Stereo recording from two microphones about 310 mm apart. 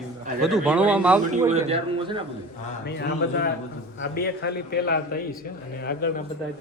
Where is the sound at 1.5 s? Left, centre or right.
Centre.